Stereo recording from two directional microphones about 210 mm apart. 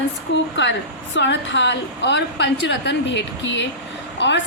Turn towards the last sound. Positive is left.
turn(degrees=60)  # may be behind; listen again after turning